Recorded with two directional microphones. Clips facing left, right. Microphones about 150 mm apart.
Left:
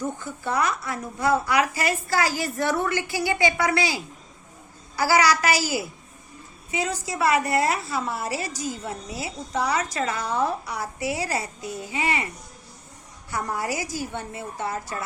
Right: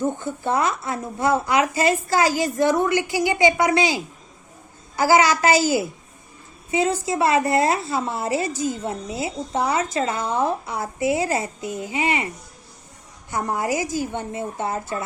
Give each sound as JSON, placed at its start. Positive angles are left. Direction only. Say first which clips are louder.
{"t": 0.0, "sound": "a woman's voice", "louder": "right 6 dB", "side_deg": -25}
{"t": 13.3, "sound": "a woman's voice", "louder": "right 4 dB", "side_deg": -20}